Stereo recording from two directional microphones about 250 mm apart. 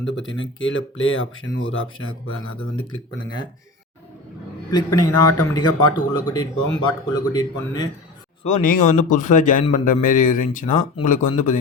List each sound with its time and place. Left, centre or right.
0.0 s speech: left
4.7 s speech: centre
8.4 s speech: left